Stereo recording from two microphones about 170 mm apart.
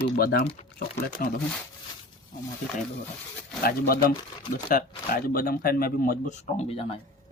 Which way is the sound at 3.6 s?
60° left (ahead or behind).